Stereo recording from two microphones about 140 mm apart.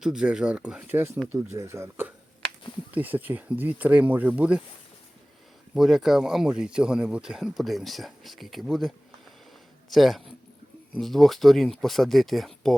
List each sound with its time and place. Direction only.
0.0 s speech: 5° right (ahead or behind)
5.7 s speech: centre (ahead or behind)
9.9 s speech: centre (ahead or behind)